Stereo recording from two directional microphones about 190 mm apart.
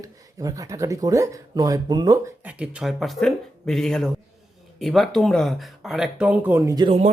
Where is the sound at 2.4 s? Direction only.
5° right (ahead or behind).